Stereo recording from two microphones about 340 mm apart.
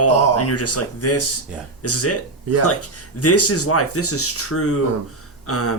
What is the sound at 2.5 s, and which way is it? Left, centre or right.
Speech, right.